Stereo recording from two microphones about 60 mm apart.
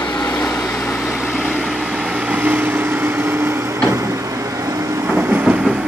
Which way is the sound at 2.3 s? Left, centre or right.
Right.